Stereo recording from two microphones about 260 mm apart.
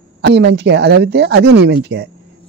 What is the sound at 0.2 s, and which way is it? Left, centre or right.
Speech, right.